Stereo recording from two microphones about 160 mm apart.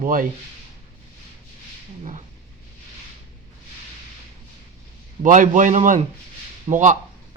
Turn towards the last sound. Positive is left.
turn(degrees=-50)  # may be behind; listen again after turning